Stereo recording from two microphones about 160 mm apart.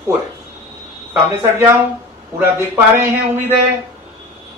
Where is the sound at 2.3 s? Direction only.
15° right (ahead or behind).